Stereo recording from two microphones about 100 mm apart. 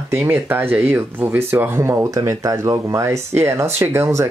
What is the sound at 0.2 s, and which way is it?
Speech, 20° right (ahead or behind).